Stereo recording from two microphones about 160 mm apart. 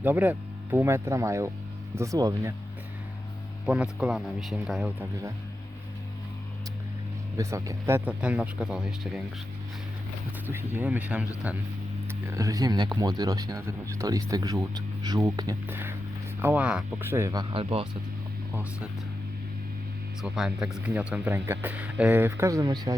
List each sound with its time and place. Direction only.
0.0 s speech: 10° right (ahead or behind)
3.7 s speech: 5° right (ahead or behind)
7.3 s speech: 20° right (ahead or behind)
10.8 s speech: 10° right (ahead or behind)
12.3 s speech: 20° right (ahead or behind)
17.5 s speech: 35° right (ahead or behind)
20.2 s speech: 5° right (ahead or behind); by 23.0 s 25° right (ahead or behind)